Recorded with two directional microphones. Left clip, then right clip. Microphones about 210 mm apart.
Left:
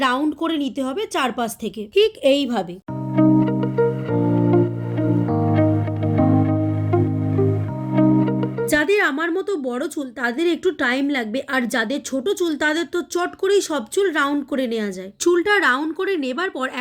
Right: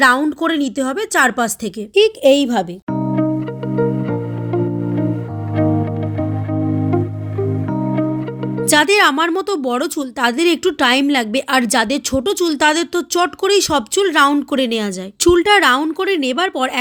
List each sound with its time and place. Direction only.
0.0 s a woman's voice: 35° right (ahead or behind)
3.2 s music: centre (ahead or behind)
6.1 s music: centre (ahead or behind)
8.7 s a woman's voice: 45° right (ahead or behind)